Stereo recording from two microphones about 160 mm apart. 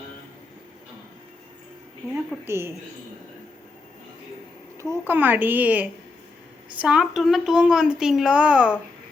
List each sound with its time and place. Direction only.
2.4 s speech: 15° right (ahead or behind)
4.8 s speech: 15° right (ahead or behind)